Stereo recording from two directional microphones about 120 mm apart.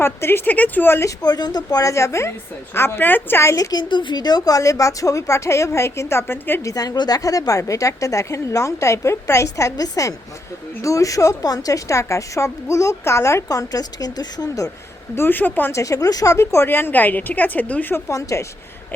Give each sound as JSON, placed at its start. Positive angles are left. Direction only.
{"t": 0.0, "sound": "a woman's voice", "side_deg": 20}
{"t": 1.2, "sound": "a woman's voice", "side_deg": 35}
{"t": 15.1, "sound": "speech", "side_deg": 20}
{"t": 18.1, "sound": "a woman's voice", "side_deg": 25}